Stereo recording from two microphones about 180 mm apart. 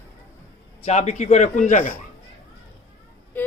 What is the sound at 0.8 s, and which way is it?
Speech, 40° left (ahead or behind).